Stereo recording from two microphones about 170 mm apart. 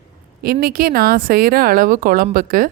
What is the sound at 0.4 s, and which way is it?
A woman's voice, 60° right (ahead or behind).